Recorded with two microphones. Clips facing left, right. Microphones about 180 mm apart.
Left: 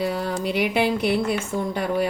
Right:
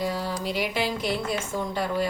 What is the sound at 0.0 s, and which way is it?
Speech, 65° left (ahead or behind).